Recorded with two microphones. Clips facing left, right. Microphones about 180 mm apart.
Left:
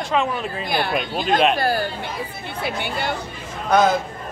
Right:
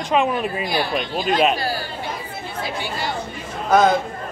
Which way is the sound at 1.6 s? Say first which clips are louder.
Left 4 dB; 55° left (ahead or behind).